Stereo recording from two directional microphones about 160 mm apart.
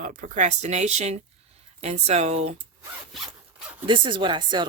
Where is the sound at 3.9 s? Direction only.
30° right (ahead or behind).